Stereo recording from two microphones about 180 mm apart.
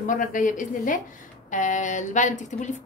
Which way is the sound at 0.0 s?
45° left (ahead or behind).